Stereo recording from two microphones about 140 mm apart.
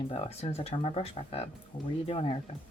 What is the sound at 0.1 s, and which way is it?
Speech, 45° left (ahead or behind).